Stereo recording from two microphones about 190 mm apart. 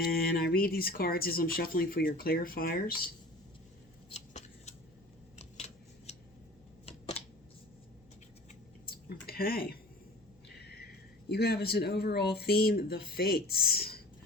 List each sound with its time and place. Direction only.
0.0 s speech: 55° left (ahead or behind)
4.1 s scissors: 35° left (ahead or behind)
8.9 s a sound: 55° left (ahead or behind)
11.3 s speech: 55° left (ahead or behind)